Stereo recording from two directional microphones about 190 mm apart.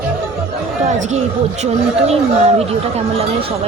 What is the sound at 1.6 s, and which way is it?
Speech, 35° right (ahead or behind).